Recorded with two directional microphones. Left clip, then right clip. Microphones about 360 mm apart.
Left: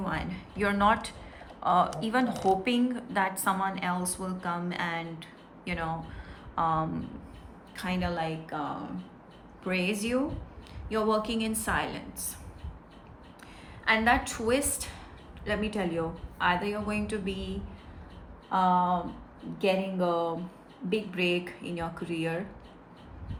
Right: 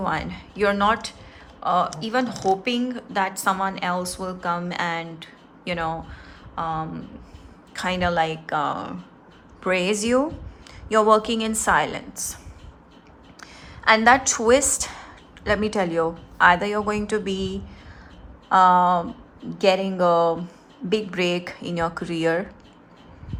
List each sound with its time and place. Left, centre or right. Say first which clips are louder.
0.0 s speech: right 8 dB; centre
7.7 s a woman's voice: right 10 dB; centre
13.4 s a woman's voice: right 10 dB; centre
18.4 s a woman's voice: right 10 dB; right